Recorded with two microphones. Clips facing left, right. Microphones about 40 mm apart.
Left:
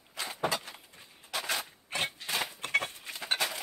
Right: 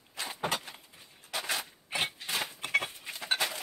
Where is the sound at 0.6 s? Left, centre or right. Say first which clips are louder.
Left 1 dB; centre.